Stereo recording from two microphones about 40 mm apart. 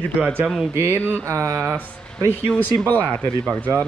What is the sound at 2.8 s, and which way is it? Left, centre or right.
Speech, left.